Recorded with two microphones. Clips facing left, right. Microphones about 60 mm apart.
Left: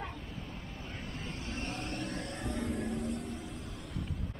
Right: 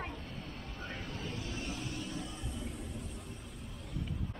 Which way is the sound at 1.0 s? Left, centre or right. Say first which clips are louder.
Even; left.